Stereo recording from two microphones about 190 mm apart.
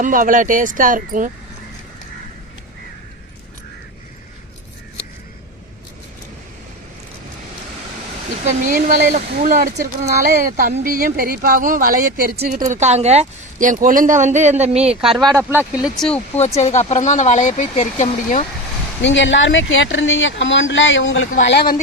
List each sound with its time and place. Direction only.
0.0 s speech: 45° right (ahead or behind)
8.4 s speech: 45° right (ahead or behind)
15.0 s speech: centre (ahead or behind)
15.3 s speech: 15° right (ahead or behind); by 16.4 s 5° left (ahead or behind)
16.6 s speech: 35° left (ahead or behind)
19.0 s speech: 70° left (ahead or behind)
21.4 s speech: 60° left (ahead or behind)